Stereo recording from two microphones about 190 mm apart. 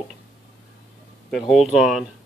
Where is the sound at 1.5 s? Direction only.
Centre (ahead or behind).